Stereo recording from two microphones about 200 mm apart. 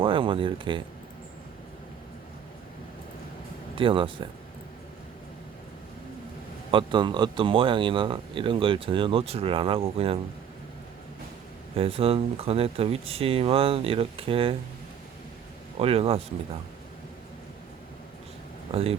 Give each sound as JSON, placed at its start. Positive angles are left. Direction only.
{"t": 0.0, "sound": "speech", "side_deg": -25}
{"t": 3.8, "sound": "speech", "side_deg": -25}
{"t": 6.7, "sound": "speech", "side_deg": -25}
{"t": 11.8, "sound": "speech", "side_deg": -30}
{"t": 15.8, "sound": "speech", "side_deg": -30}
{"t": 18.7, "sound": "speech", "side_deg": -30}